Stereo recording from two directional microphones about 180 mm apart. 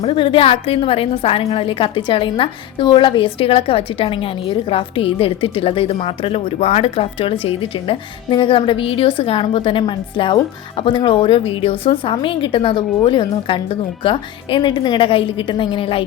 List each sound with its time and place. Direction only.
0.0 s a woman's voice: 30° left (ahead or behind)